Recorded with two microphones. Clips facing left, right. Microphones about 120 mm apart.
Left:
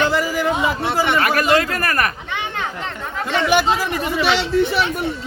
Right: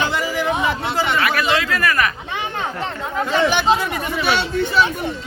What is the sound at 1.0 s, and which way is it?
Speech, 45° left (ahead or behind).